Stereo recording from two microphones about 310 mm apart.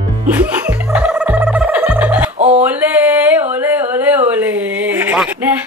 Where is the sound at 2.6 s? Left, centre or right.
Centre.